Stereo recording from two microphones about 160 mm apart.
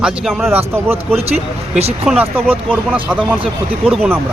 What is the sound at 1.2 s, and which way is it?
Speech, 40° right (ahead or behind).